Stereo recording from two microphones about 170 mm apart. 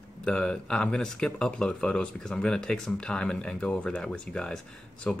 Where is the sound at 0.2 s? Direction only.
5° left (ahead or behind).